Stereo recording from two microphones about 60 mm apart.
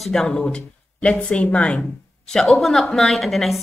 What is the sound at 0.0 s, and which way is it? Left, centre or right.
Speech, centre.